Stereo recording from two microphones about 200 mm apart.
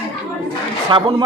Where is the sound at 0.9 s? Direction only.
25° right (ahead or behind).